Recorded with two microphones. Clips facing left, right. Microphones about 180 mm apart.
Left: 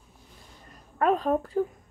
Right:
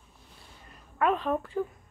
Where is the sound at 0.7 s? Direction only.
40° left (ahead or behind).